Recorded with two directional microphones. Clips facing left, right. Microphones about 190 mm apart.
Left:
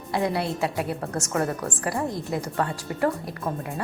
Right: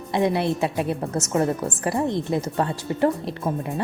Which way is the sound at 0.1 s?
20° right (ahead or behind).